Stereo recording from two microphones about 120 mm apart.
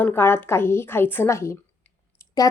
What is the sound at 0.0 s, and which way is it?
A woman's voice, 20° left (ahead or behind).